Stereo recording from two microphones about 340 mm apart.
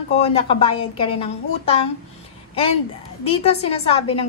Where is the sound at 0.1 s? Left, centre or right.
Centre.